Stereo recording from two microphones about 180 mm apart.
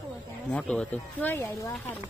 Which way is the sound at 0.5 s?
5° left (ahead or behind).